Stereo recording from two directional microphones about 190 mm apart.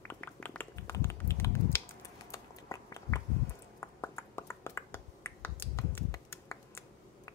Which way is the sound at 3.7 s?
15° left (ahead or behind).